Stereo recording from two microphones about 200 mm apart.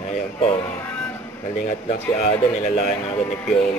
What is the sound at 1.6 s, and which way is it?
Speech, 40° left (ahead or behind).